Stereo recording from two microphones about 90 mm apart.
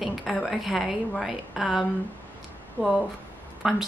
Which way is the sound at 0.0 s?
Centre (ahead or behind).